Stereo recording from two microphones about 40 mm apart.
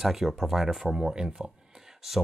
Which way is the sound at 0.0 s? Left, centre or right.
Centre.